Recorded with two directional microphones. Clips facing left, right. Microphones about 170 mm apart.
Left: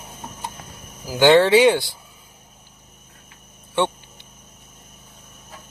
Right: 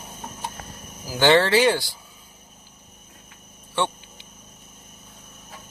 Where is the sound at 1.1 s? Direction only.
15° left (ahead or behind).